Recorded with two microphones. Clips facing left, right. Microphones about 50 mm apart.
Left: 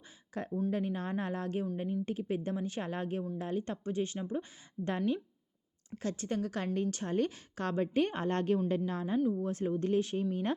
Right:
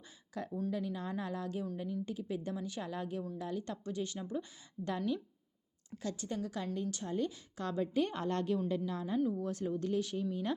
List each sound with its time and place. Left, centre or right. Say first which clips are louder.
0.3 s a woman's voice: left 4 dB; left